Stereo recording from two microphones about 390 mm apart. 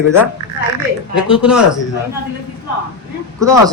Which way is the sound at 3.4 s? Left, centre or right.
Centre.